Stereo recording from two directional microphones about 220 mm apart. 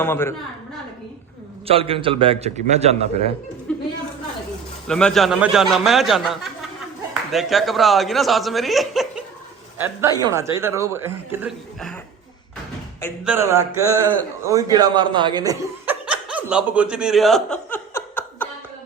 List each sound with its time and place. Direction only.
0.0 s a woman's voice: 10° left (ahead or behind)
1.6 s a man's voice: 25° right (ahead or behind)
3.7 s a sound: 5° left (ahead or behind)
4.9 s a man's voice: 5° left (ahead or behind)
9.7 s a man's voice: 10° right (ahead or behind)
13.2 s a man's voice: 10° right (ahead or behind)
16.0 s chuckle: 5° right (ahead or behind)